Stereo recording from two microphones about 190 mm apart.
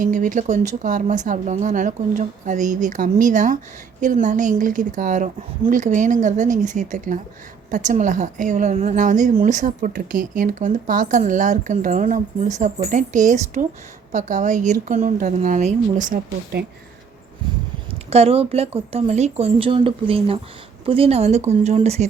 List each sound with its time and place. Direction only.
0.0 s speech: 40° right (ahead or behind)
18.1 s speech: 30° right (ahead or behind)